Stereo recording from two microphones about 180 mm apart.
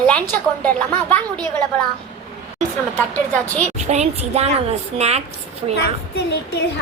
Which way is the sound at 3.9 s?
35° right (ahead or behind).